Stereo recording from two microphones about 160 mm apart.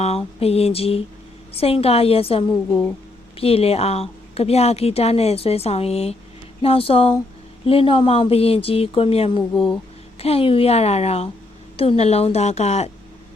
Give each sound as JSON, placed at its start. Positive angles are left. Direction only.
{"t": 0.0, "sound": "a woman's voice", "side_deg": 40}